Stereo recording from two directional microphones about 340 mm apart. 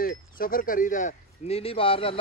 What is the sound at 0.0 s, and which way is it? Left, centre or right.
Speech, left.